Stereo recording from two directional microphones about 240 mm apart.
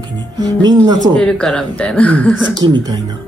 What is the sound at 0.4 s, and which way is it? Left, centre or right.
Speech, centre.